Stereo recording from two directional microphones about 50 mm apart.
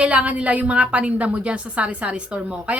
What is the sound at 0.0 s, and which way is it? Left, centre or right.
A woman's voice, right.